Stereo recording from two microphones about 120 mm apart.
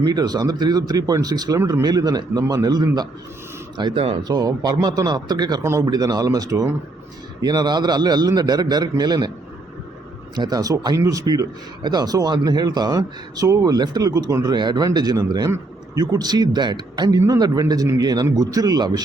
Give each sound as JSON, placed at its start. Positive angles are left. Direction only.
{"t": 0.0, "sound": "speech", "side_deg": -35}
{"t": 10.3, "sound": "speech", "side_deg": -35}